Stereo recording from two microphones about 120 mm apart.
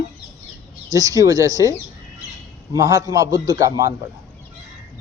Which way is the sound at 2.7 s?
30° right (ahead or behind).